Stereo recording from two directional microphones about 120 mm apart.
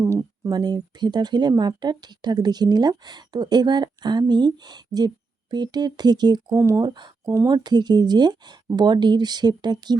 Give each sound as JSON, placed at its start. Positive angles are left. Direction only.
{"t": 0.0, "sound": "speech", "side_deg": -25}
{"t": 6.8, "sound": "speech", "side_deg": -40}